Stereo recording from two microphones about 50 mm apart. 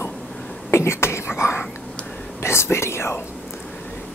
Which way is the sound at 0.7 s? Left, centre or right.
Left.